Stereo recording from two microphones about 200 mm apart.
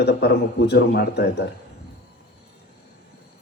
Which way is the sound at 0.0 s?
55° left (ahead or behind).